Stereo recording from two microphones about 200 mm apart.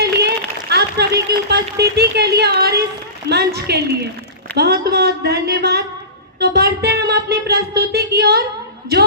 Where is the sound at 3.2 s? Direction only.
55° right (ahead or behind).